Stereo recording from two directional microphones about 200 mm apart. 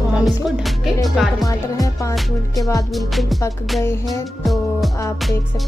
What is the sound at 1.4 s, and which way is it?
Music, 15° left (ahead or behind).